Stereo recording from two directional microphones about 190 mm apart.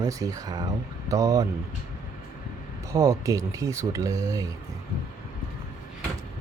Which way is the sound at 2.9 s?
15° right (ahead or behind).